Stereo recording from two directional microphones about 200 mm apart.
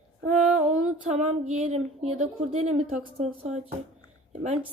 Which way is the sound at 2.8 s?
35° right (ahead or behind).